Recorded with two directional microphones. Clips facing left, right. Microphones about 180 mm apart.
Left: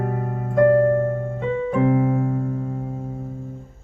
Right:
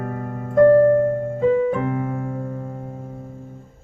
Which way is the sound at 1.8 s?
25° left (ahead or behind).